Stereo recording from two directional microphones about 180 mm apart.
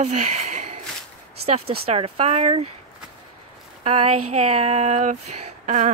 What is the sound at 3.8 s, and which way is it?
Speech, 35° right (ahead or behind).